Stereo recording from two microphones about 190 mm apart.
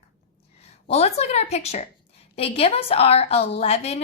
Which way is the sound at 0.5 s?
35° left (ahead or behind).